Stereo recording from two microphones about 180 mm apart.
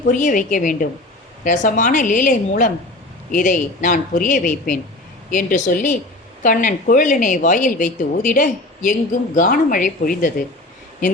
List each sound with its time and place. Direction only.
0.1 s speech: 45° left (ahead or behind)